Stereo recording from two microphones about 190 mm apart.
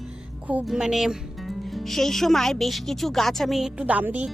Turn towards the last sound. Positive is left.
turn(degrees=-10)  # may be behind; listen again after turning